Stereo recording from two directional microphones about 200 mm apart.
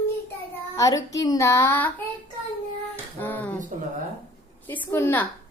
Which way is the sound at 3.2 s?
10° left (ahead or behind).